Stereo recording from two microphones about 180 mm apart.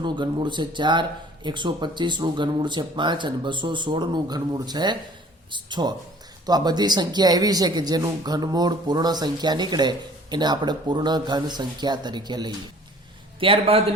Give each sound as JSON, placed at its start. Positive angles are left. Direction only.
{"t": 0.0, "sound": "speech", "side_deg": -25}